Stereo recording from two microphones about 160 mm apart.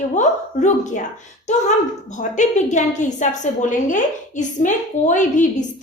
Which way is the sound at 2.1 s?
50° left (ahead or behind).